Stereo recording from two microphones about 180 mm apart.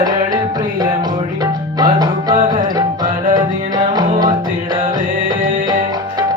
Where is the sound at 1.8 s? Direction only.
25° right (ahead or behind).